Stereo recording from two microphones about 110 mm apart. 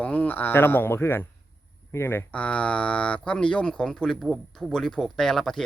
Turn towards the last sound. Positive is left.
turn(degrees=5)  # may be behind; listen again after turning